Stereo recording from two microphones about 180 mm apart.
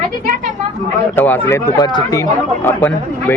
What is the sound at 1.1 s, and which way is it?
Speech, 10° left (ahead or behind).